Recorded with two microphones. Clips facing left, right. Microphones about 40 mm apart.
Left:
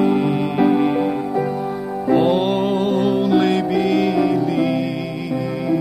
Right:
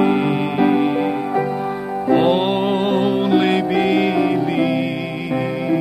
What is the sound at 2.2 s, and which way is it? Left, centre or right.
Music, right.